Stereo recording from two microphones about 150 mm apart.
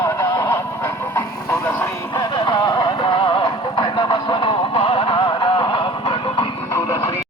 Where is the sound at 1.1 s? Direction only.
15° left (ahead or behind).